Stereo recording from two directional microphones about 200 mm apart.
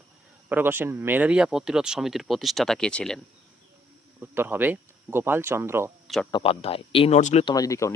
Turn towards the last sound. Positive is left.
turn(degrees=15)  # may be behind; listen again after turning